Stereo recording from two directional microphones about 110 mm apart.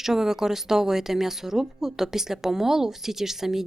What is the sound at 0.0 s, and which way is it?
A woman's voice, 5° right (ahead or behind).